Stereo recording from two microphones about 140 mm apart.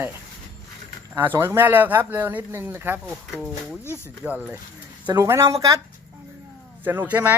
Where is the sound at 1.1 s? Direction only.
15° right (ahead or behind).